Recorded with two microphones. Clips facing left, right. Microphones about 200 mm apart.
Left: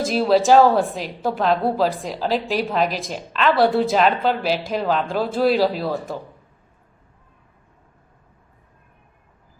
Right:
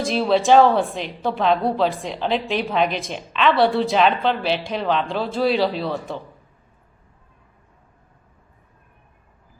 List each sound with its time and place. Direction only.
0.0 s a woman's voice: centre (ahead or behind)